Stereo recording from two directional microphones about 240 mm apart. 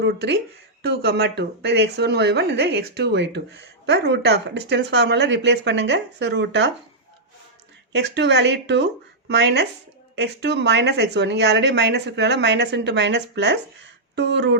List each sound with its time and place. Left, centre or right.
0.0 s speech: right
7.9 s speech: right